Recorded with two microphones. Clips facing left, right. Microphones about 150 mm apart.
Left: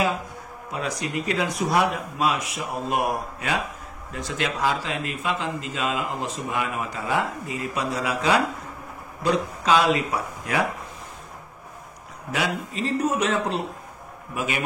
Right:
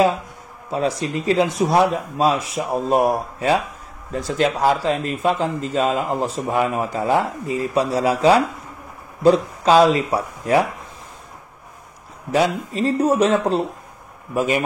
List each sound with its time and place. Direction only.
0.7 s speech: 30° right (ahead or behind)
12.3 s speech: 35° right (ahead or behind)